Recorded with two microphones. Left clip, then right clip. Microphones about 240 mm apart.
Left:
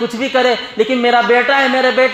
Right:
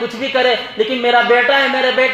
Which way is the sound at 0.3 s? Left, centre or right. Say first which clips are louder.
Left 1 dB; left.